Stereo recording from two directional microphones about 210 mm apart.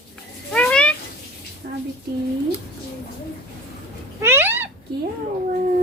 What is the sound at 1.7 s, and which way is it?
Child singing, 45° right (ahead or behind).